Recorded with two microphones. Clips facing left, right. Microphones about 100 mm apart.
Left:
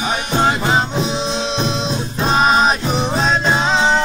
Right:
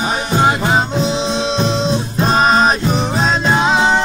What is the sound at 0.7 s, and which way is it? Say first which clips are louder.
Music: right 2 dB; 5° left (ahead or behind).